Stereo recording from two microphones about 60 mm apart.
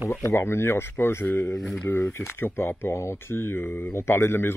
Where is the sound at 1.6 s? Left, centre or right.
Centre.